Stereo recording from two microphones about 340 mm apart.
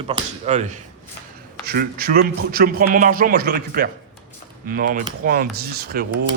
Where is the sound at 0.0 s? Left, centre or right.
Centre.